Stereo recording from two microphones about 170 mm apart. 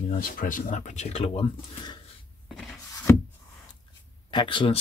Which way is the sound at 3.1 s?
15° left (ahead or behind).